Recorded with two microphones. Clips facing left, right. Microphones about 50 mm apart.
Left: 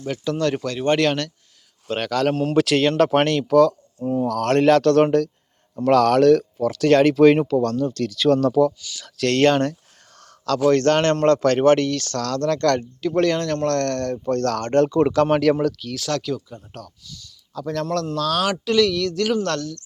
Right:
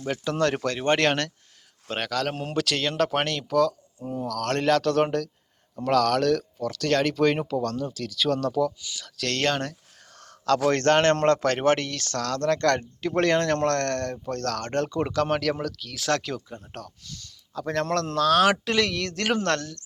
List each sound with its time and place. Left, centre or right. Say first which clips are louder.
0.3 s speech: left 2 dB; right
1.9 s speech: left 6 dB; centre
2.6 s speech: left 7 dB; centre
4.0 s speech: left 8 dB; left
4.4 s speech: left 7 dB; centre
10.2 s a sound: left 1 dB; right
11.3 s speech: left 6 dB; centre
14.3 s speech: left 7 dB; centre
14.8 s speech: left 7 dB; centre
16.0 s speech: left 1 dB; right
17.5 s a man's voice: left 1 dB; right
17.8 s speech: left 2 dB; right
18.2 s speech: right 6 dB; right